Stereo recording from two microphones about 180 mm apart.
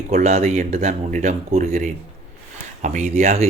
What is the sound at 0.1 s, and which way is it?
Speech, 40° right (ahead or behind).